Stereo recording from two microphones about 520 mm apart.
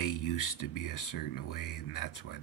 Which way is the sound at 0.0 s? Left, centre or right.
Left.